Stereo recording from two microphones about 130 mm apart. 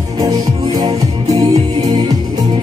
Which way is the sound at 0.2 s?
30° right (ahead or behind).